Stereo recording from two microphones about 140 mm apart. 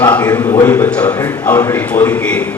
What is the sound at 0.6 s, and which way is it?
A man's voice, 15° left (ahead or behind).